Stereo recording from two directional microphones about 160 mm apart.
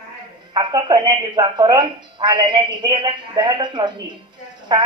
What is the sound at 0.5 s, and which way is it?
A woman's voice, 25° right (ahead or behind).